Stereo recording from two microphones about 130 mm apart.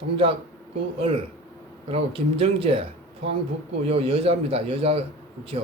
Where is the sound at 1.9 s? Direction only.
45° right (ahead or behind).